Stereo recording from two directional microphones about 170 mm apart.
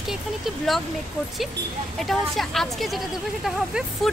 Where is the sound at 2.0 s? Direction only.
Centre (ahead or behind).